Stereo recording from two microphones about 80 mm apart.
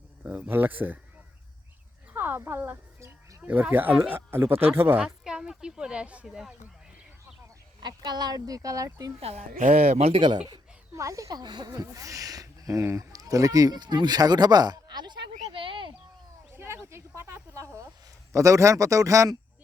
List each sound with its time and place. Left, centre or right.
0.2 s speech: right
2.1 s speech: right
5.0 s a woman's voice: centre
6.2 s speech: centre
7.8 s speech: right
10.2 s speech: right
10.9 s speech: right
11.4 s speech: right
11.7 s speech: right
16.5 s a sound: right
18.3 s speech: right